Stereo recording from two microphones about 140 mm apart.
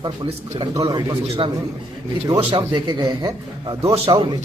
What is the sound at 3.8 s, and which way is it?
Speech, 45° right (ahead or behind).